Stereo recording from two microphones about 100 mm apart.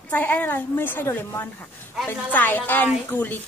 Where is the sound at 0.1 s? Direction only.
15° left (ahead or behind).